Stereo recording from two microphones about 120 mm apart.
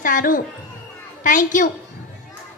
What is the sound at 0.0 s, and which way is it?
A woman's voice, 90° left.